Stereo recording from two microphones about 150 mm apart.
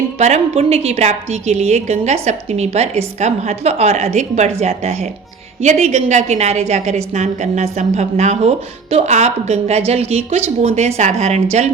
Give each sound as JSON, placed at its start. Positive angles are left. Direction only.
{"t": 0.2, "sound": "a woman's voice", "side_deg": -50}